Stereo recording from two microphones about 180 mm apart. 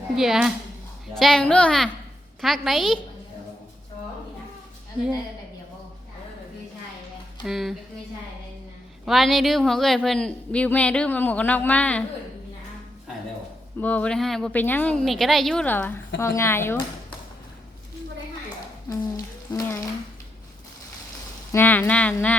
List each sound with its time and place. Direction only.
0.2 s a woman's voice: centre (ahead or behind)
7.4 s a woman's voice: centre (ahead or behind)
9.0 s a woman's voice: centre (ahead or behind)
13.8 s a woman's voice: 10° left (ahead or behind)
18.9 s a sound: 20° left (ahead or behind)
21.5 s a woman's voice: 10° left (ahead or behind)